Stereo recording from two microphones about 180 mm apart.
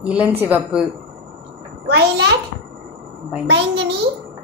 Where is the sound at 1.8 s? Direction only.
65° right (ahead or behind).